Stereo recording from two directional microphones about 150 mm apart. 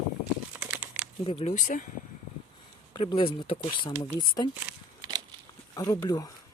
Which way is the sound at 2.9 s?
35° left (ahead or behind).